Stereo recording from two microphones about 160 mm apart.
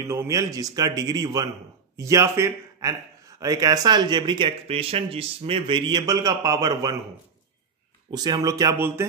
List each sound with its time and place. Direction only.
0.1 s speech: 20° right (ahead or behind)
8.1 s speech: 25° right (ahead or behind)